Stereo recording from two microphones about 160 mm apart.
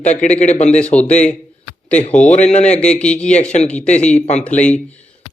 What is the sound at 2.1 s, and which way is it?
Speech, 5° left (ahead or behind).